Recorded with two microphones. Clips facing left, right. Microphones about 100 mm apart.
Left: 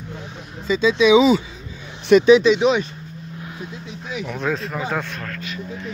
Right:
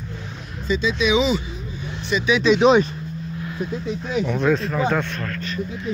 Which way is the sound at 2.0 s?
70° left (ahead or behind).